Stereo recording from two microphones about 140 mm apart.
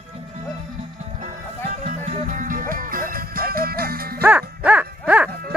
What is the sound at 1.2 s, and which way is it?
Music, 70° right (ahead or behind).